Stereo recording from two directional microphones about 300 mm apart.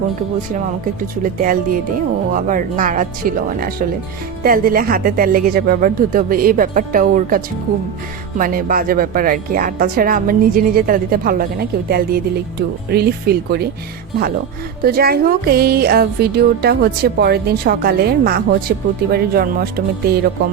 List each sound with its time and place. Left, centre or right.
1.2 s a woman's voice: right
14.8 s speech: right